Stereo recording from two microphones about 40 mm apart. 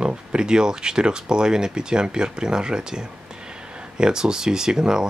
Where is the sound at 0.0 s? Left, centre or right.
Right.